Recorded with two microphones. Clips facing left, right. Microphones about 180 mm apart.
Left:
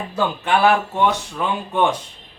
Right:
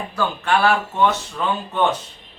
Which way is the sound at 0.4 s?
15° left (ahead or behind).